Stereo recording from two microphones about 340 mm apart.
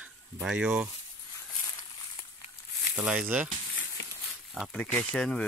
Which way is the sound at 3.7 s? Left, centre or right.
Left.